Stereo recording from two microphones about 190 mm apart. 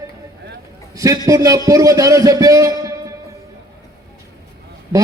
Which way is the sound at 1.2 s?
15° right (ahead or behind).